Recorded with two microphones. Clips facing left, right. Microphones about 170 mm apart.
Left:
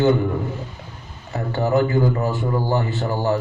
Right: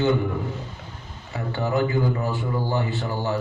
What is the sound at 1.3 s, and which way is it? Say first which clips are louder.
A man's voice: left 5 dB; 40° left (ahead or behind).